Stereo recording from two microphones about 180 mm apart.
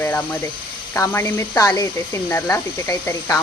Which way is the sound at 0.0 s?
10° left (ahead or behind).